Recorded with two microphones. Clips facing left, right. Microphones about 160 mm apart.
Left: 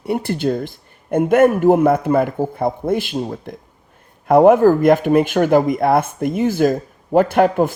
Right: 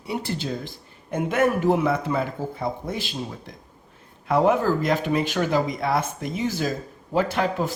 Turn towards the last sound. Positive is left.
turn(degrees=55)  # may be behind; listen again after turning